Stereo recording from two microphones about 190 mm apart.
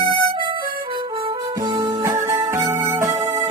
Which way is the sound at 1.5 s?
20° right (ahead or behind).